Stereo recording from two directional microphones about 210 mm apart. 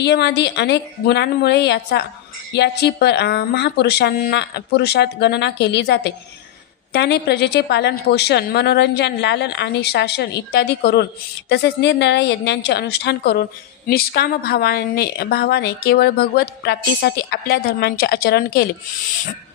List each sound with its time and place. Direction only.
0.0 s a woman's voice: 55° left (ahead or behind)